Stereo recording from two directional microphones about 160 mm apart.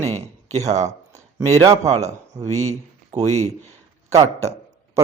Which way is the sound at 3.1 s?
45° right (ahead or behind).